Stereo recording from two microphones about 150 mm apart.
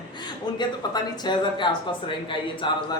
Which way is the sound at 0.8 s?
30° left (ahead or behind).